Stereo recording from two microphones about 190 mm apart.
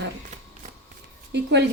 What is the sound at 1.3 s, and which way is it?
Speech, 65° right (ahead or behind).